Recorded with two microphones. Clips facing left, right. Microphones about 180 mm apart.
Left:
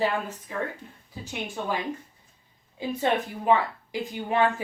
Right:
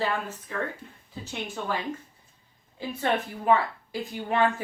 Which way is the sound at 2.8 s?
15° left (ahead or behind).